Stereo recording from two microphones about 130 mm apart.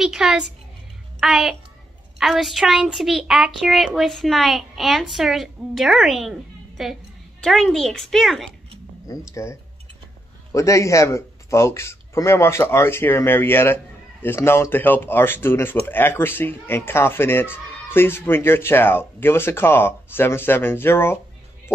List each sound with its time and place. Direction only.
0.0 s a woman's voice: 5° right (ahead or behind)
9.3 s speech: 20° left (ahead or behind)